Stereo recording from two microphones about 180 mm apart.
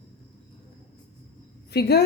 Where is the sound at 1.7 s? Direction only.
65° left (ahead or behind).